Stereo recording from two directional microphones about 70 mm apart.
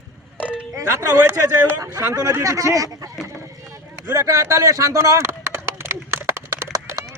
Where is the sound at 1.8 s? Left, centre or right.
Right.